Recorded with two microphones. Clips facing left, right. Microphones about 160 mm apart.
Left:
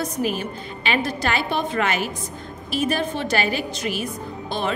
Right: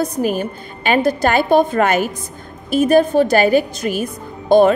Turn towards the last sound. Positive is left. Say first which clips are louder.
# right 14 dB
turn(degrees=-50)  # may be behind; listen again after turning